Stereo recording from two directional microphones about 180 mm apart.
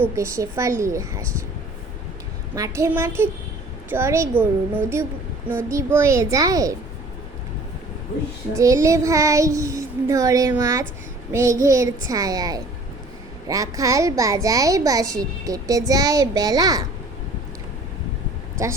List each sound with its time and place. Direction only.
0.2 s child singing: 15° right (ahead or behind)
2.6 s child singing: 15° right (ahead or behind)
8.5 s child singing: 15° right (ahead or behind)
10.6 s a child's voice: 20° right (ahead or behind)
11.3 s child singing: 15° right (ahead or behind)
12.0 s a child's voice: 20° right (ahead or behind)